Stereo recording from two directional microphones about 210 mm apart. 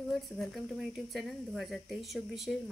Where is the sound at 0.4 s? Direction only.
Centre (ahead or behind).